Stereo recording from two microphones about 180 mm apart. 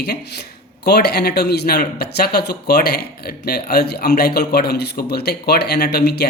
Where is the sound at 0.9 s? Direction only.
65° left (ahead or behind).